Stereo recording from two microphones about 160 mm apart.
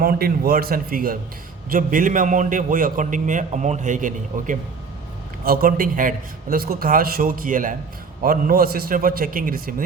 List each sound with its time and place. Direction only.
0.0 s a man's voice: 70° right (ahead or behind)